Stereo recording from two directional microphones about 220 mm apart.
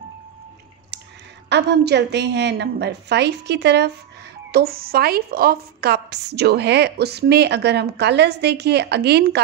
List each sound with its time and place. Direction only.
1.5 s a woman's voice: 50° right (ahead or behind)